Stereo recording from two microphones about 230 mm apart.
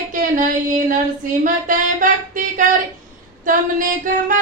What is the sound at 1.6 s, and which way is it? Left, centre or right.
Speech, right.